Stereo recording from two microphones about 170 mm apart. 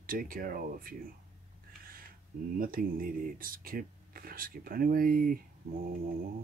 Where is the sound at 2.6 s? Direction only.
55° right (ahead or behind).